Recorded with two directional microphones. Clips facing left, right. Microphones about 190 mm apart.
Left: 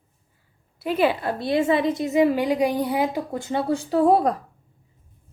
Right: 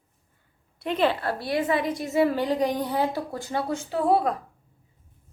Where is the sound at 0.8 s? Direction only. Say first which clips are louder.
Left 3 dB; 5° left (ahead or behind); by 4.3 s 40° left (ahead or behind).